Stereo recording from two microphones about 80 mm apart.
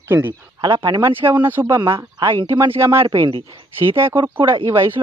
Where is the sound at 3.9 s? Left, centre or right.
Right.